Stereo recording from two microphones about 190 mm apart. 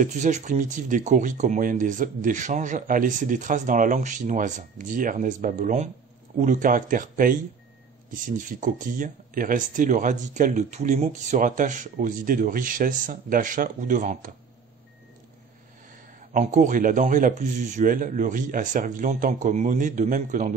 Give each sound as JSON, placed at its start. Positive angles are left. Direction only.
{"t": 0.0, "sound": "speech", "side_deg": -40}
{"t": 16.2, "sound": "speech", "side_deg": -40}